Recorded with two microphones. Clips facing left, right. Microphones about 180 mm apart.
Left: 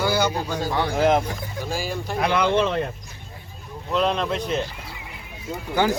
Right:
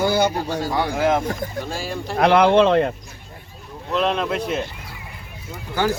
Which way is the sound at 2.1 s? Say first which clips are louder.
Right 7 dB; 60° right (ahead or behind).